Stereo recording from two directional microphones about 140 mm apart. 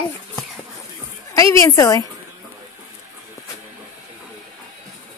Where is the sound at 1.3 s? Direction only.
20° left (ahead or behind).